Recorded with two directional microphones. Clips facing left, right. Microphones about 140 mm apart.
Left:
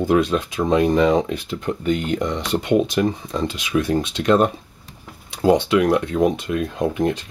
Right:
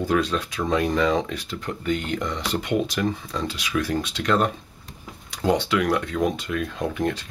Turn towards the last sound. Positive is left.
turn(degrees=20)  # may be behind; listen again after turning